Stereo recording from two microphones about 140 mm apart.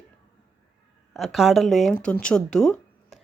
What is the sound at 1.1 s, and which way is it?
Speech, centre (ahead or behind).